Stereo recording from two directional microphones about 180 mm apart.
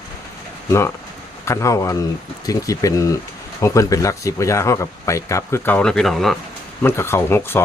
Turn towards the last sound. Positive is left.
turn(degrees=15)  # may be behind; listen again after turning